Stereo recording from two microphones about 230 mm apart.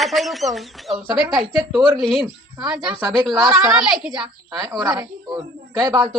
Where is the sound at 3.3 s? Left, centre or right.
Centre.